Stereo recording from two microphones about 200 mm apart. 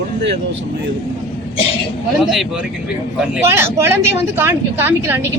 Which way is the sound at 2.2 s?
Centre (ahead or behind).